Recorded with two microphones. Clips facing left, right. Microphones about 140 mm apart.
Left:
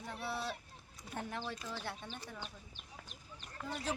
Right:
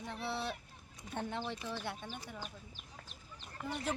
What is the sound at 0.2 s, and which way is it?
Speech, 25° right (ahead or behind).